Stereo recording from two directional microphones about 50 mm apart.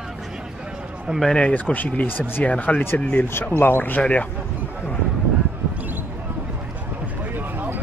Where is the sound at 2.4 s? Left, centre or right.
Left.